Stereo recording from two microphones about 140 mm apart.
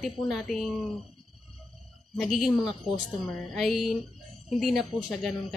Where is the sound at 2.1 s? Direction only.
Centre (ahead or behind).